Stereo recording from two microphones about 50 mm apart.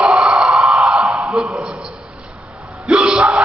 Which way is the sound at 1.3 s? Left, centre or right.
Centre.